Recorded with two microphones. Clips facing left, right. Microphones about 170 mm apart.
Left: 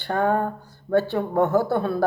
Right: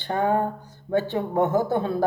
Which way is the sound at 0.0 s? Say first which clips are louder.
Left 1 dB; 20° right (ahead or behind).